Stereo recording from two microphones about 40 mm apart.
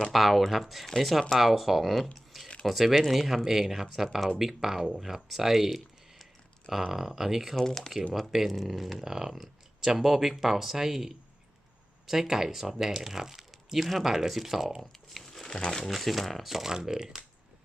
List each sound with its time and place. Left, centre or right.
0.1 s speech: centre
2.1 s a sound: centre
2.6 s speech: centre
7.5 s speech: centre
8.1 s speech: centre
14.8 s crumpling: centre
15.6 s speech: centre
15.9 s speech: centre